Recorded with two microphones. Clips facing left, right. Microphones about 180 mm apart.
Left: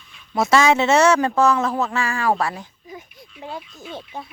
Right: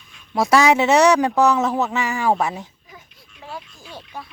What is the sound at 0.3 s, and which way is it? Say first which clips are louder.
Speech: right 1 dB; 15° right (ahead or behind).